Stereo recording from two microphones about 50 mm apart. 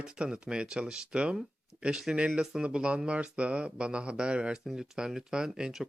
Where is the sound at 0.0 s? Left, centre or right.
Centre.